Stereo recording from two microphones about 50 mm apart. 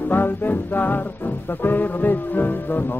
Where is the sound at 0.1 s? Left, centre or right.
Left.